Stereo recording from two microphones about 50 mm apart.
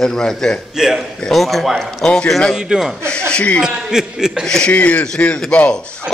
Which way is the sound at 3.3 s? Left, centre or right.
Left.